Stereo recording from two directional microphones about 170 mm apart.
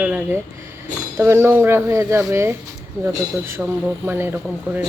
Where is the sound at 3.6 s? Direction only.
5° right (ahead or behind).